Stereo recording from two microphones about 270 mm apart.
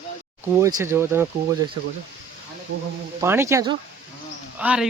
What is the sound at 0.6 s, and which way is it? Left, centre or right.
Speech, centre.